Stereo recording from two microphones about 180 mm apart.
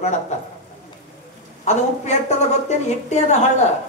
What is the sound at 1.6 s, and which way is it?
Speech, 40° left (ahead or behind).